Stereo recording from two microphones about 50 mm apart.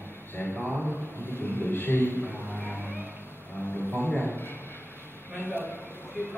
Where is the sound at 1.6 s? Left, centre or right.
Left.